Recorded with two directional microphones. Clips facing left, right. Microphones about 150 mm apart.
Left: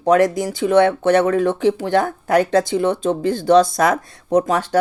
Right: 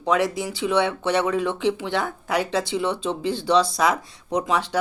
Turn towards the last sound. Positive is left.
turn(degrees=45)  # may be behind; listen again after turning